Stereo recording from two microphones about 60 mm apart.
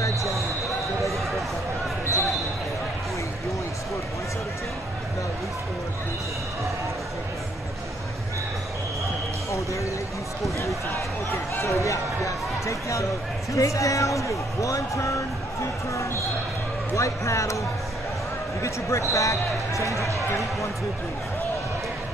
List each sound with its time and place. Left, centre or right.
11.5 s speech: left
18.6 s speech: left